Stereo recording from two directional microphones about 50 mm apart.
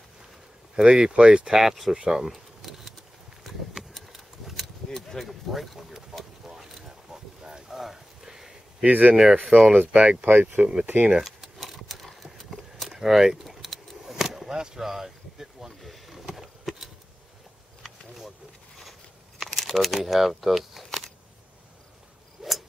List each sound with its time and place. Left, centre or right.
0.7 s speech: centre
1.6 s speech: centre
2.0 s keys jangling: centre
3.4 s a sound: centre
8.8 s speech: right
9.1 s speech: centre; by 10.7 s right
11.1 s keys jangling: centre
15.8 s vehicle: centre
17.8 s a sound: centre